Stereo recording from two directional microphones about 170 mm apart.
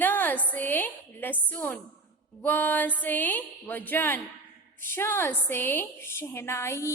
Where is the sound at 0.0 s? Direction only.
10° left (ahead or behind).